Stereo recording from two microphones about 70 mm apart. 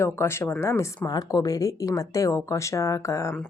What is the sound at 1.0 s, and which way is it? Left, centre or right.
A woman's voice, left.